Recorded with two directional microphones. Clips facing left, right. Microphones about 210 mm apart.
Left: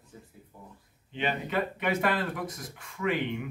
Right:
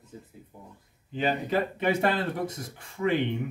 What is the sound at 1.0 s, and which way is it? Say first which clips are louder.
Speech: right 4 dB; 40° right (ahead or behind).